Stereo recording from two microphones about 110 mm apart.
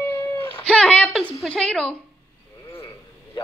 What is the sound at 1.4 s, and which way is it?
Speech, 10° left (ahead or behind).